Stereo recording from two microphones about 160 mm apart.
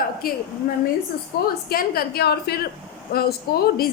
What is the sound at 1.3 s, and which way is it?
A woman's voice, 75° left (ahead or behind).